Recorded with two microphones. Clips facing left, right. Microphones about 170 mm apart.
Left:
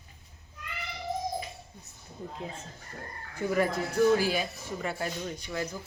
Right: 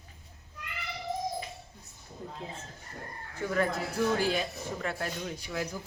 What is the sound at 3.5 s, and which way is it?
Speech, 10° left (ahead or behind).